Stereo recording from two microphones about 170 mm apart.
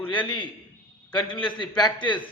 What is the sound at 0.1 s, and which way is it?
Speech, 30° left (ahead or behind).